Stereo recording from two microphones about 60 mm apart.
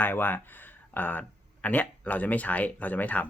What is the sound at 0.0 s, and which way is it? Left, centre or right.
Speech, left.